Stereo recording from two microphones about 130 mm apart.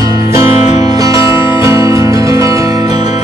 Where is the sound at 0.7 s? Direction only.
60° left (ahead or behind).